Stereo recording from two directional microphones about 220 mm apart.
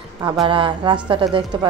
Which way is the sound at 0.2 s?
20° right (ahead or behind).